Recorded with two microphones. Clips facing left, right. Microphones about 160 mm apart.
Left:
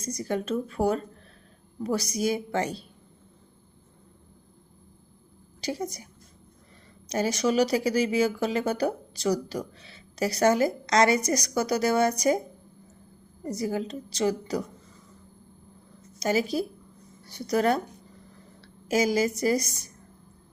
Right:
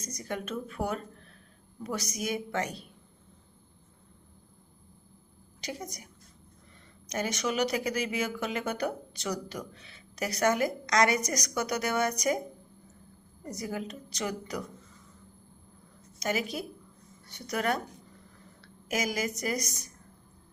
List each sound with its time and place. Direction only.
0.0 s speech: 30° left (ahead or behind)
5.5 s a woman's voice: 30° left (ahead or behind)
7.1 s speech: 35° left (ahead or behind)
13.4 s a woman's voice: 30° left (ahead or behind)
16.2 s speech: 35° left (ahead or behind)